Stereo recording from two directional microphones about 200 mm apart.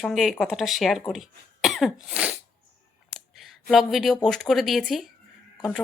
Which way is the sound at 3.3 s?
Centre (ahead or behind).